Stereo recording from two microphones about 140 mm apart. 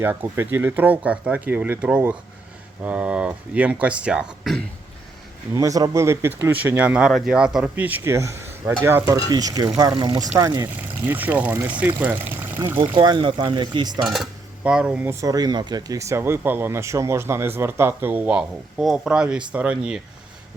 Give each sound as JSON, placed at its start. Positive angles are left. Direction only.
{"t": 0.0, "sound": "speech", "side_deg": -15}
{"t": 5.5, "sound": "speech", "side_deg": -25}
{"t": 9.1, "sound": "speech", "side_deg": -25}
{"t": 10.8, "sound": "speech", "side_deg": -15}
{"t": 12.8, "sound": "speech", "side_deg": -30}
{"t": 14.1, "sound": "cutlery", "side_deg": -5}
{"t": 15.2, "sound": "speech", "side_deg": -25}